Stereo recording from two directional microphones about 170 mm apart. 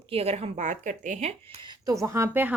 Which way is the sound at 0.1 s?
35° right (ahead or behind).